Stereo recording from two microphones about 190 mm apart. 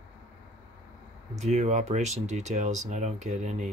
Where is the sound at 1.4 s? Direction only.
35° right (ahead or behind).